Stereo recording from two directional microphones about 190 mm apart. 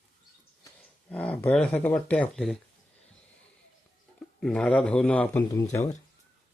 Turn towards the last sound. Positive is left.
turn(degrees=15)  # may be behind; listen again after turning